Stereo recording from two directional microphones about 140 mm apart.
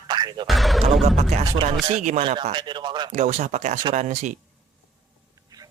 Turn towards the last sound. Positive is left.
turn(degrees=-60)  # may be behind; listen again after turning